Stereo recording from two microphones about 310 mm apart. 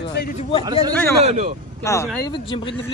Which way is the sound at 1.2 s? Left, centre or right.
Right.